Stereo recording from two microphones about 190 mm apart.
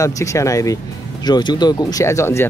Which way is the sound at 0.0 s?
15° left (ahead or behind).